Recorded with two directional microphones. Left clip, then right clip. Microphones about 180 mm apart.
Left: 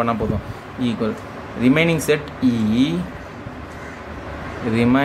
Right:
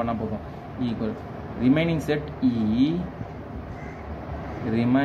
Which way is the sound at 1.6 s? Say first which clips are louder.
Left 6 dB; 35° left (ahead or behind).